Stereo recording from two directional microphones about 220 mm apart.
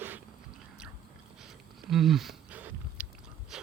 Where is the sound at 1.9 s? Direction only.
Centre (ahead or behind).